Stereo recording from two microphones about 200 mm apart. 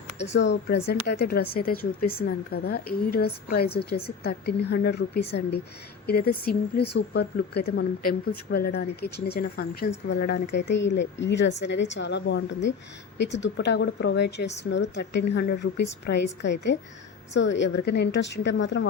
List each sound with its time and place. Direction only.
0.3 s a woman's voice: 60° left (ahead or behind)